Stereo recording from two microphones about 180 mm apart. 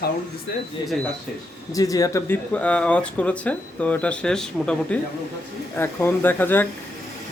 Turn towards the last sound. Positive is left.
turn(degrees=10)  # may be behind; listen again after turning